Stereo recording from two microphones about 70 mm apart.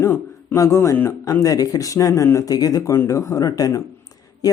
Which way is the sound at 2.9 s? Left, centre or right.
Left.